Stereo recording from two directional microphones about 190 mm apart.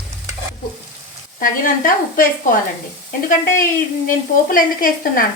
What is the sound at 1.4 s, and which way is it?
Speech, 45° left (ahead or behind).